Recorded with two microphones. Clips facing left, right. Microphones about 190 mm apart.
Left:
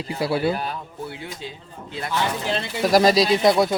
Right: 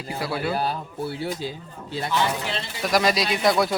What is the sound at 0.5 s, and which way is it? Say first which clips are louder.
A man's voice: right 3 dB; 35° right (ahead or behind).